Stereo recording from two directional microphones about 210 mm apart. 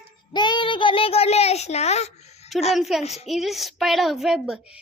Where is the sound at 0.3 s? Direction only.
20° left (ahead or behind).